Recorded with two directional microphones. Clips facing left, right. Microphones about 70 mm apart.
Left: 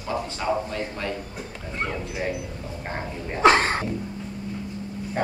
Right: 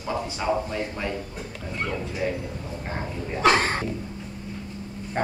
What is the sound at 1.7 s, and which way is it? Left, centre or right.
Speech, left.